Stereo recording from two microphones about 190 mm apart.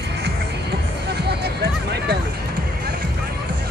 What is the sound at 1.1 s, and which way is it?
Music, 60° right (ahead or behind).